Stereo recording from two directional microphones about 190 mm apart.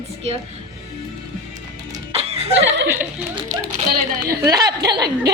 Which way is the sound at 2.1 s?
30° right (ahead or behind).